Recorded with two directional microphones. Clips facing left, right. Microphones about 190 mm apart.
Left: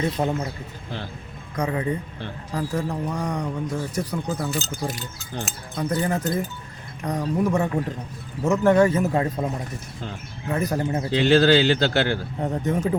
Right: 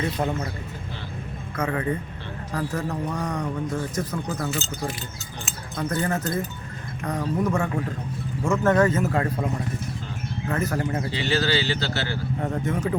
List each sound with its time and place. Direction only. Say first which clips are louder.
0.2 s speech: left 2 dB; 25° left (ahead or behind)
1.5 s speech: left 1 dB; 15° left (ahead or behind)
5.7 s speech: left 2 dB; 15° left (ahead or behind)
10.5 s speech: left 2 dB; 15° left (ahead or behind)
11.2 s speech: left 9 dB; 55° left (ahead or behind)
12.4 s speech: left 2 dB; 20° left (ahead or behind)